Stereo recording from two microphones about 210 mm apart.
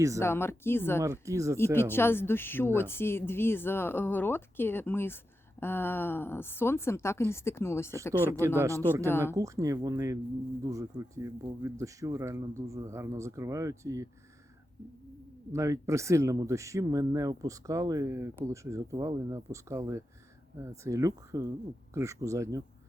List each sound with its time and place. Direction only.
0.2 s speech: 10° left (ahead or behind)
1.0 s speech: 15° right (ahead or behind)
1.7 s speech: 10° left (ahead or behind)
8.4 s speech: 15° right (ahead or behind)
15.5 s speech: 15° right (ahead or behind)